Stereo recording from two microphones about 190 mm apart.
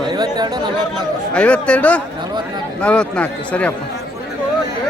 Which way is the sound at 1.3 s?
5° left (ahead or behind).